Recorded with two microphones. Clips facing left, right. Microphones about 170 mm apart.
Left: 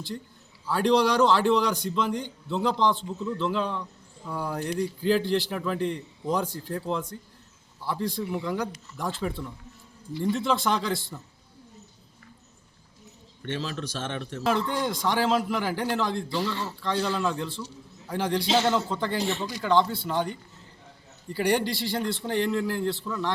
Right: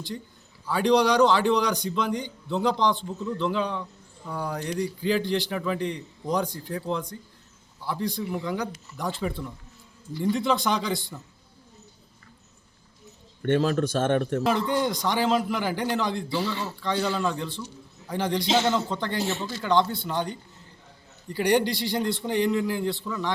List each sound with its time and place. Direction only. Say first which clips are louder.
0.7 s a man's voice: right 1 dB; centre (ahead or behind)
13.4 s a man's voice: right 10 dB; 50° right (ahead or behind)
14.4 s a man's voice: right 2 dB; centre (ahead or behind)
21.3 s a man's voice: right 2 dB; 5° left (ahead or behind)